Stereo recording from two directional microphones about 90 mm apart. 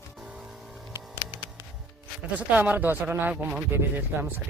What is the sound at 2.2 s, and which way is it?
Speech, 15° right (ahead or behind).